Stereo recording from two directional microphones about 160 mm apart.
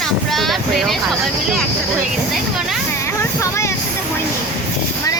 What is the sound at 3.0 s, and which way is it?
Vehicle, 15° left (ahead or behind).